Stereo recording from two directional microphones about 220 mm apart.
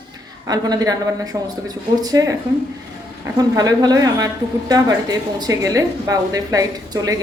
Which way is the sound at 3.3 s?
15° right (ahead or behind).